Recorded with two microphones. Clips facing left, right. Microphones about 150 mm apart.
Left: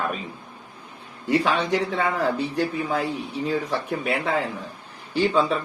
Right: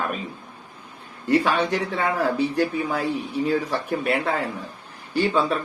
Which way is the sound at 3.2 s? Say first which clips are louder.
Right 3 dB; 65° right (ahead or behind).